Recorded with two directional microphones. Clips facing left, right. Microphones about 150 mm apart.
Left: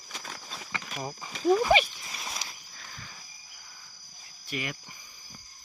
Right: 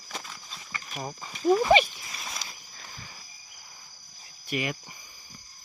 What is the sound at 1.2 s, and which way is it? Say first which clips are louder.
Speech: right 1 dB; 5° left (ahead or behind).